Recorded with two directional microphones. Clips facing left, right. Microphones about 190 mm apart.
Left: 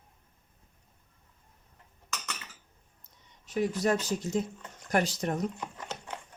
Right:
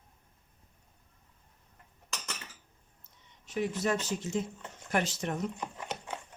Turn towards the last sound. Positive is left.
turn(degrees=-10)  # may be behind; listen again after turning